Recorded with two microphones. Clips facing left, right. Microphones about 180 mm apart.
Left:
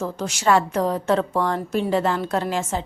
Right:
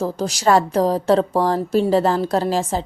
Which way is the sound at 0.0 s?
35° right (ahead or behind).